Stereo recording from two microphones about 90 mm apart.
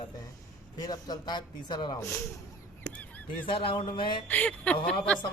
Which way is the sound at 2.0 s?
25° left (ahead or behind).